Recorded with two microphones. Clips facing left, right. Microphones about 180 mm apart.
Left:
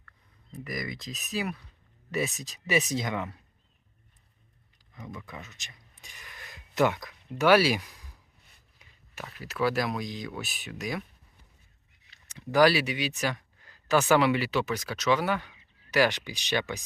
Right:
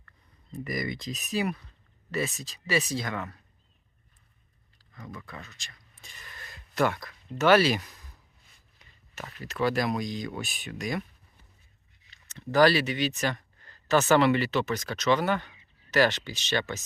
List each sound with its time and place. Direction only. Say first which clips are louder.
0.5 s speech: right 3 dB; centre (ahead or behind)
2.1 s speech: even; 15° left (ahead or behind)
5.1 s speech: right 1 dB; 15° left (ahead or behind)
12.3 s speech: even; 10° left (ahead or behind)